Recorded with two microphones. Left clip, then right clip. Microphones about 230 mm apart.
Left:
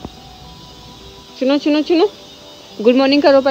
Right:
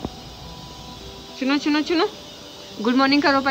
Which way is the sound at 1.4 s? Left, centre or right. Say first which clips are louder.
Left 7 dB; centre.